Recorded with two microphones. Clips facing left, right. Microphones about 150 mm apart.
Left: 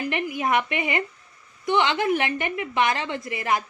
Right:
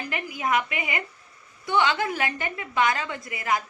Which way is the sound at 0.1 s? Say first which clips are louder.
Left 1 dB; 25° left (ahead or behind).